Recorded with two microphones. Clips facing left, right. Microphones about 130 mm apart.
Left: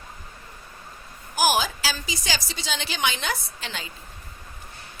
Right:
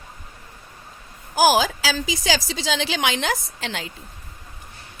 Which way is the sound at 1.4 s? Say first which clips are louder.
Right 5 dB; 90° right.